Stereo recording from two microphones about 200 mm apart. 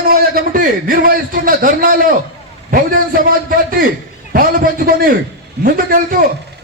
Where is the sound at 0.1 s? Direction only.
50° right (ahead or behind).